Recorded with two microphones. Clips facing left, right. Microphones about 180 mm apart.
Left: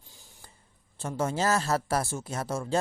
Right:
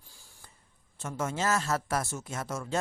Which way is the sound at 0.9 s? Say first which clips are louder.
Left 4 dB; 30° left (ahead or behind).